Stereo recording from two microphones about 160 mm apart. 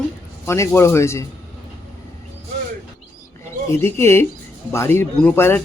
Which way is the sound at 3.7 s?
15° left (ahead or behind).